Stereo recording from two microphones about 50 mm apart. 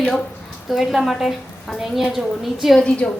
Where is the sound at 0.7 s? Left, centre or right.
Centre.